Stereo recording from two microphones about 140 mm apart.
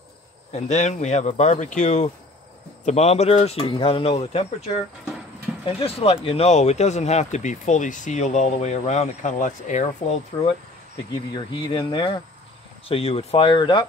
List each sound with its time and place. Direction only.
0.5 s speech: 55° left (ahead or behind)
10.3 s speech: 30° left (ahead or behind)